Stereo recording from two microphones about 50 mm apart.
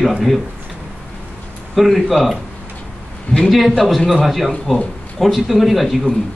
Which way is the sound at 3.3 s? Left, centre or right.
Centre.